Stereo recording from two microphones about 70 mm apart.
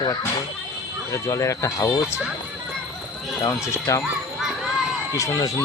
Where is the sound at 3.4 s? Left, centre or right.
Left.